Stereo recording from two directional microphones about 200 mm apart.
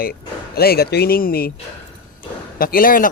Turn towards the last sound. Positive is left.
turn(degrees=45)  # may be behind; listen again after turning